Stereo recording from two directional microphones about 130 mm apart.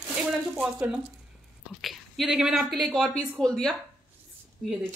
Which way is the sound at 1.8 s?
Centre (ahead or behind).